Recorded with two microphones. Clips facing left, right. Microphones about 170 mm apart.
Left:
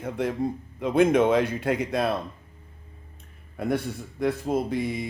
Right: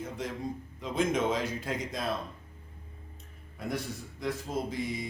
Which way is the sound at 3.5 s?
60° left (ahead or behind).